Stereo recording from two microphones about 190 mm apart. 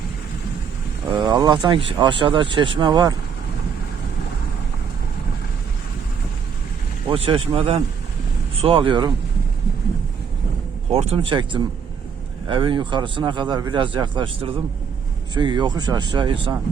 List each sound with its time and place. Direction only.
1.1 s speech: 20° right (ahead or behind)
7.1 s speech: 30° right (ahead or behind)
10.9 s speech: 30° right (ahead or behind)